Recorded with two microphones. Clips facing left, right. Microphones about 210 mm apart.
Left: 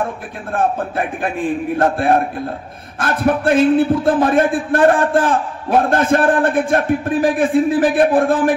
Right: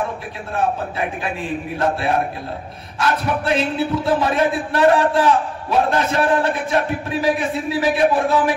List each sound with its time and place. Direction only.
0.5 s a man's voice: 50° left (ahead or behind)